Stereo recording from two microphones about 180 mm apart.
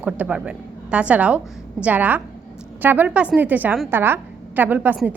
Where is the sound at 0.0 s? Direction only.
5° right (ahead or behind).